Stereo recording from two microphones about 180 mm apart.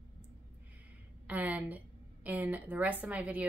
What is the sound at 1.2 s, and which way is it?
Speech, 10° right (ahead or behind).